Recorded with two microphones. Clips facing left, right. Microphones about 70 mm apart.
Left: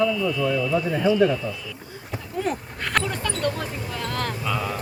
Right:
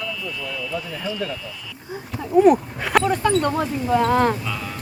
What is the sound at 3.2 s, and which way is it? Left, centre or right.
Speech, right.